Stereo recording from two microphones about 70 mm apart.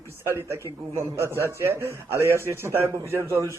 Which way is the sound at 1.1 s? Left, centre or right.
Right.